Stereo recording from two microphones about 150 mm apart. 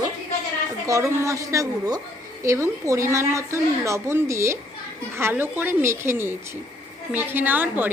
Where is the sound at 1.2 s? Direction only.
20° right (ahead or behind).